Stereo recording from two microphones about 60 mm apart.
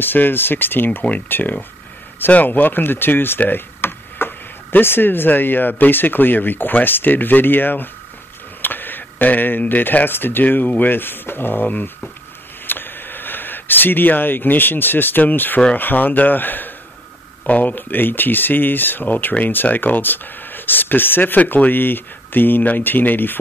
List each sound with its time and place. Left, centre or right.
0.0 s speech: left